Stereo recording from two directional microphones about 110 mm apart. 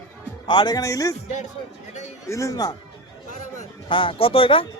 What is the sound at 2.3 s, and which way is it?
Speech, 30° left (ahead or behind).